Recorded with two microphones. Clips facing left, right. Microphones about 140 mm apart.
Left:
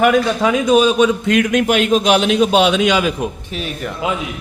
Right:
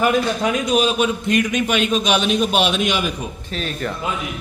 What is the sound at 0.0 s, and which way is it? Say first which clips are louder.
A man's voice: left 4 dB; 90° left.